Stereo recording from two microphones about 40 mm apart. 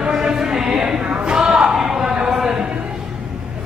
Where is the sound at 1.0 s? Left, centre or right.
Right.